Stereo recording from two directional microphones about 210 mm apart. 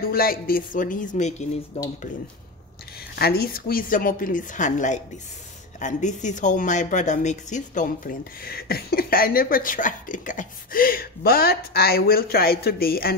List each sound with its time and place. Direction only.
0.0 s a woman's voice: 45° left (ahead or behind)
3.2 s a woman's voice: 45° left (ahead or behind)